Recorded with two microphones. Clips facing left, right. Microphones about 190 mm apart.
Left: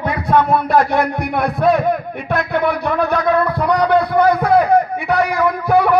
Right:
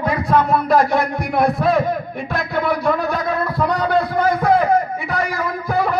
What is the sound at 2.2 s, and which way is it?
A man's voice, 60° left (ahead or behind).